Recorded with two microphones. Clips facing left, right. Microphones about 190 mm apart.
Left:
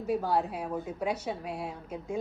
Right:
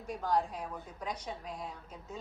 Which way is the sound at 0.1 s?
5° left (ahead or behind).